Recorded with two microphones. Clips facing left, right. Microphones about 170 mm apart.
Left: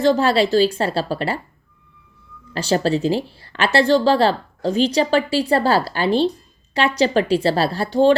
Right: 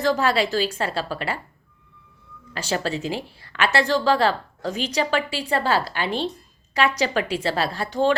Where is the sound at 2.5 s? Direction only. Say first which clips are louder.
Left 7 dB; 30° left (ahead or behind).